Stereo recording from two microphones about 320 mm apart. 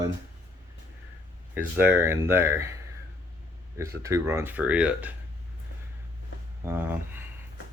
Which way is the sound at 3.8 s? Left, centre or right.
Centre.